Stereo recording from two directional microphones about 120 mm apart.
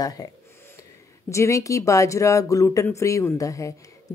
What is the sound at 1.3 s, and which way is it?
Speech, 25° left (ahead or behind).